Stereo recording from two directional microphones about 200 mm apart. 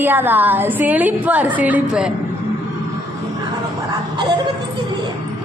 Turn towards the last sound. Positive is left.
turn(degrees=-20)  # may be behind; listen again after turning